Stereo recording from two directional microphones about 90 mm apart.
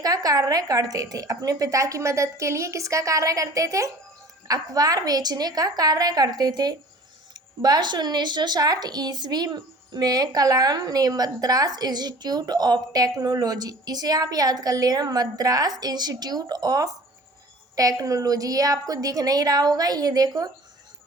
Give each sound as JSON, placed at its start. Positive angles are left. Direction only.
{"t": 0.0, "sound": "a woman's voice", "side_deg": -45}